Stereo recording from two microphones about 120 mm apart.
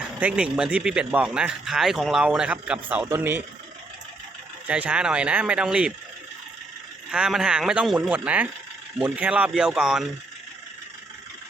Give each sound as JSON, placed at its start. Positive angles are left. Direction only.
{"t": 0.2, "sound": "speech", "side_deg": -10}
{"t": 4.6, "sound": "speech", "side_deg": -10}
{"t": 7.1, "sound": "speech", "side_deg": -5}